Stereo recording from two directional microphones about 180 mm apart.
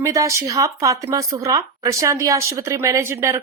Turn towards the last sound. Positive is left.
turn(degrees=-15)  # may be behind; listen again after turning